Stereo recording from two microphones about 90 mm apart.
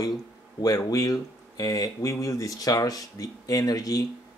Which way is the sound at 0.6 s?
45° left (ahead or behind).